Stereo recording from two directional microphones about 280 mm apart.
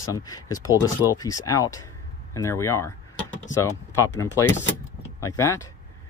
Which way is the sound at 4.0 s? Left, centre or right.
Centre.